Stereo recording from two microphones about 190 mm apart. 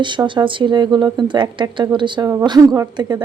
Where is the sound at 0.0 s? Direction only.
25° right (ahead or behind).